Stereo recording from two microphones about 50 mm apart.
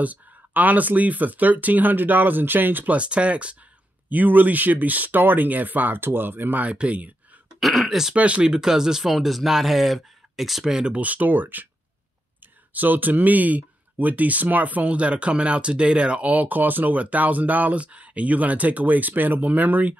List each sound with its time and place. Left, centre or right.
0.0 s speech: right
3.0 s speech: right
4.1 s speech: right
6.6 s speech: right
7.6 s speech: centre
8.1 s speech: right
8.5 s speech: centre
11.0 s speech: right
12.7 s speech: right